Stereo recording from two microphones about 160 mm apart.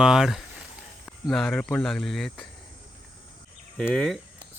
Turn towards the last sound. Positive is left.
turn(degrees=0)  # may be behind; listen again after turning